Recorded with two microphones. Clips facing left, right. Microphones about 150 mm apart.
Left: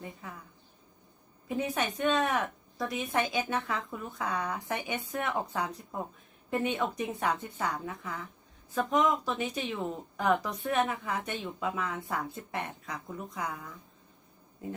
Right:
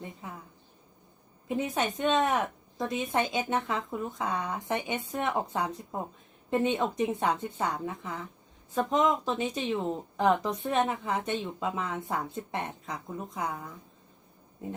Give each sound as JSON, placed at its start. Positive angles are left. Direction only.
{"t": 0.0, "sound": "speech", "side_deg": -20}
{"t": 1.5, "sound": "speech", "side_deg": -20}